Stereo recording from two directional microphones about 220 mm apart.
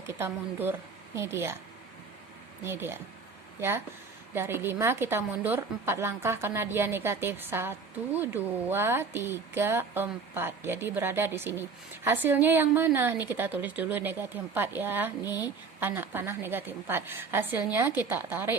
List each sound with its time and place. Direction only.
0.2 s a woman's voice: 10° right (ahead or behind)
2.6 s a woman's voice: 10° right (ahead or behind)
15.2 s speech: 15° left (ahead or behind)
15.8 s a woman's voice: 10° right (ahead or behind)